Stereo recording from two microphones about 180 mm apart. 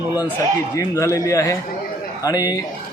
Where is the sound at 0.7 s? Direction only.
15° left (ahead or behind).